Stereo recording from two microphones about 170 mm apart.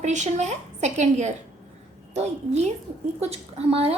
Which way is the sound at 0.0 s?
45° right (ahead or behind).